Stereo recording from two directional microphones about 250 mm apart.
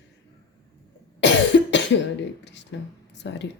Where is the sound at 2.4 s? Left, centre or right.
Left.